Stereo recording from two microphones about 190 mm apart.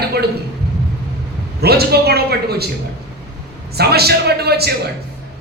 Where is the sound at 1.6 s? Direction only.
55° right (ahead or behind).